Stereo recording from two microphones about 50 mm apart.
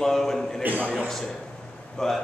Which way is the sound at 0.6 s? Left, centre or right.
Right.